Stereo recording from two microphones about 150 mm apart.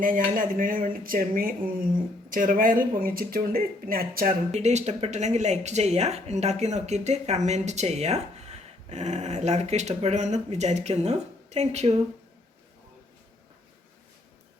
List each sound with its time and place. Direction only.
0.0 s speech: 65° right (ahead or behind)
4.5 s speech: 50° right (ahead or behind)